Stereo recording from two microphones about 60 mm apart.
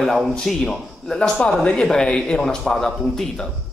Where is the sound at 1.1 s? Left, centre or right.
Centre.